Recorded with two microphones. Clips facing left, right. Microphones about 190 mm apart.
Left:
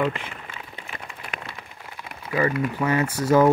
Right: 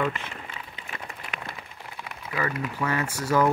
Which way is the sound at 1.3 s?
40° left (ahead or behind).